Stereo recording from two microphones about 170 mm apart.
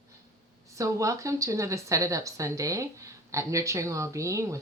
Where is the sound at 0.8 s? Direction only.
20° right (ahead or behind).